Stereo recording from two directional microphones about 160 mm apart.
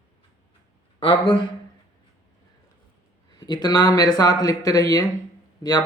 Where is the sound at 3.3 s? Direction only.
25° left (ahead or behind).